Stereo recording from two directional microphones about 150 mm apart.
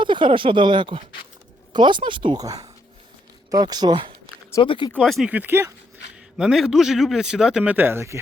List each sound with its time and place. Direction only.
0.0 s speech: 30° right (ahead or behind)
4.6 s speech: 35° left (ahead or behind)
4.9 s a man's voice: 5° left (ahead or behind)
5.3 s speech: 15° right (ahead or behind)
6.3 s a man's voice: 5° right (ahead or behind)